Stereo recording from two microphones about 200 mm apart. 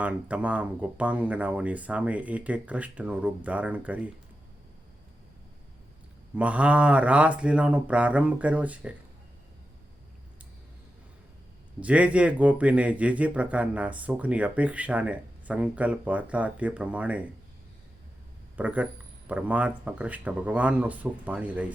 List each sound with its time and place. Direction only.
0.0 s speech: 5° right (ahead or behind)
6.3 s speech: 5° right (ahead or behind)
11.8 s speech: 5° right (ahead or behind)
18.5 s speech: 5° right (ahead or behind)